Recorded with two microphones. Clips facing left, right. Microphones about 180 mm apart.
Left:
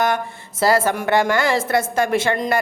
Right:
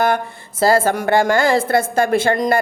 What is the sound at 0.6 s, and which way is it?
A woman's voice, 30° right (ahead or behind).